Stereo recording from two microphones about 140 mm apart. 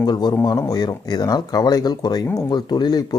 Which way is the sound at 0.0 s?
30° left (ahead or behind).